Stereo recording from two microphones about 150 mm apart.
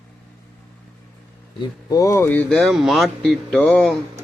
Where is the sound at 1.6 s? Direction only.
25° left (ahead or behind); by 4.0 s 10° left (ahead or behind).